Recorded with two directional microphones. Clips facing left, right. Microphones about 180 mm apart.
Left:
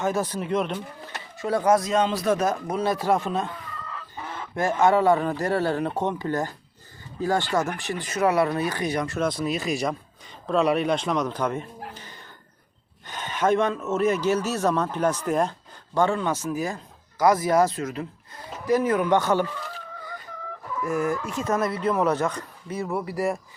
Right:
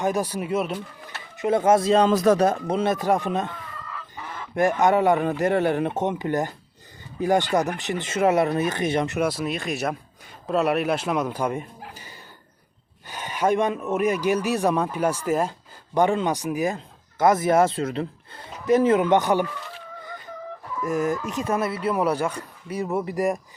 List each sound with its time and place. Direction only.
0.0 s speech: 15° right (ahead or behind)
1.4 s speech: 20° right (ahead or behind)
2.0 s speech: 45° right (ahead or behind)
2.5 s speech: 25° right (ahead or behind)
4.5 s speech: 20° right (ahead or behind)
9.2 s speech: 5° right (ahead or behind)
16.0 s speech: 15° right (ahead or behind)
20.8 s speech: 20° right (ahead or behind)